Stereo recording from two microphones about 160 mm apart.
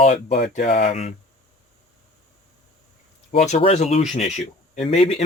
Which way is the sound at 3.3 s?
40° left (ahead or behind).